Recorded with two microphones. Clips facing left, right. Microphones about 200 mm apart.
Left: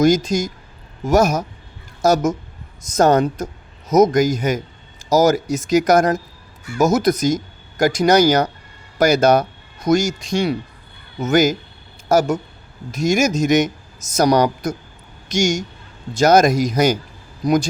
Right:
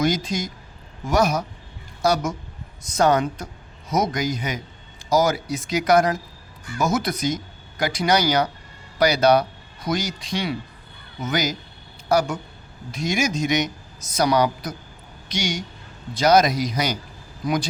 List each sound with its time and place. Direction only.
0.0 s speech: 45° left (ahead or behind)